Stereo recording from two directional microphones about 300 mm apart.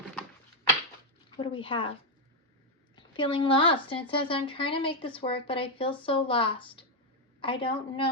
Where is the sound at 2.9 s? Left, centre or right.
Centre.